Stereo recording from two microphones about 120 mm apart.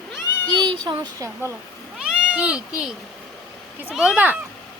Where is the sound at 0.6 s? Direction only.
40° right (ahead or behind).